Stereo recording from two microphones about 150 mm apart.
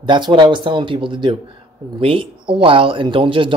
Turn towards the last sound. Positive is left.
turn(degrees=-35)  # may be behind; listen again after turning